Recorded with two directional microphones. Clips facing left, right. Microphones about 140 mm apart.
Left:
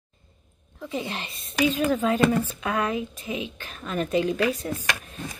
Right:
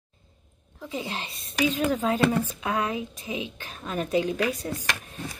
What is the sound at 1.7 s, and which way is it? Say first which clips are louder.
Speech: left 2 dB; 15° right (ahead or behind).